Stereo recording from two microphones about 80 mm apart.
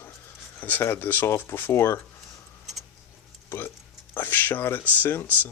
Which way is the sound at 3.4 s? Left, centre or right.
Left.